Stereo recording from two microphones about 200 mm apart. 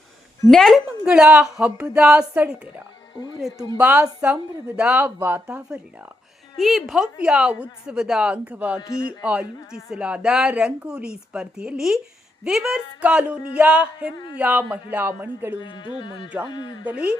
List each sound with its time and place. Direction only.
0.5 s a woman's voice: centre (ahead or behind)
15.5 s speech: 25° left (ahead or behind)
16.8 s a woman's voice: 5° right (ahead or behind)